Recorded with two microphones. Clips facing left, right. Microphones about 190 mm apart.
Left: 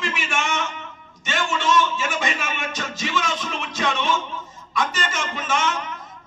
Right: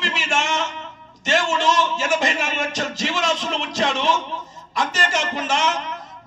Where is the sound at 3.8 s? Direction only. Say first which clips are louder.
Right 1 dB; 40° right (ahead or behind).